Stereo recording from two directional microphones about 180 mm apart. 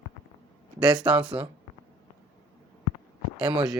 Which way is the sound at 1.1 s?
5° right (ahead or behind).